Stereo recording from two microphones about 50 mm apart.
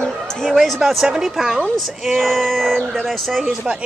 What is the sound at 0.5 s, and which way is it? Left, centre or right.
Speech, centre.